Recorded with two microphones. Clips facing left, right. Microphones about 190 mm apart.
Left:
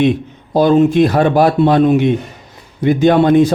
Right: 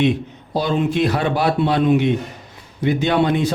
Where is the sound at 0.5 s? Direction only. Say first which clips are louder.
Left 9 dB; 50° left (ahead or behind).